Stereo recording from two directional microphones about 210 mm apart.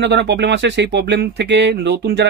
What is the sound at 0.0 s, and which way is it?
Speech, 55° right (ahead or behind).